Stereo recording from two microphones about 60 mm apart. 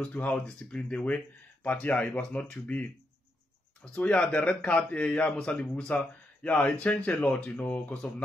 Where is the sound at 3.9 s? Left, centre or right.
Centre.